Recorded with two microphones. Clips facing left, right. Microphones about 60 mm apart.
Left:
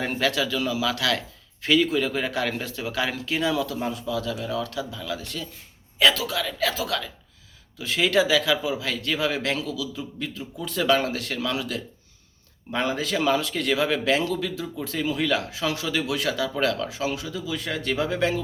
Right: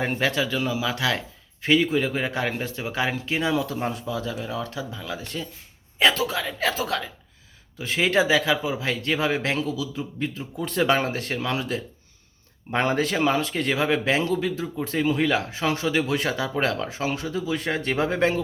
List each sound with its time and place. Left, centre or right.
0.0 s speech: right